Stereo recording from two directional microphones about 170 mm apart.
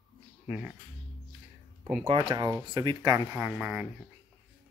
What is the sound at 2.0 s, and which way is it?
Speech, 30° right (ahead or behind).